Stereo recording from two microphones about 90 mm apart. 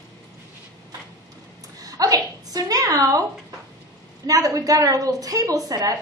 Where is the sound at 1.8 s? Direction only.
40° right (ahead or behind).